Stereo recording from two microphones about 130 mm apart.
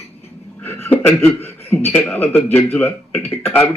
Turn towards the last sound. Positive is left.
turn(degrees=15)  # may be behind; listen again after turning